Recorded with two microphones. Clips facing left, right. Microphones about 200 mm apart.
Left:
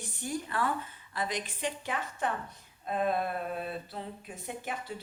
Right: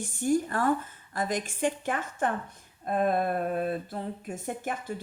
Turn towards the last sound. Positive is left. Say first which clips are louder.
# right 5 dB
turn(degrees=-50)  # may be behind; listen again after turning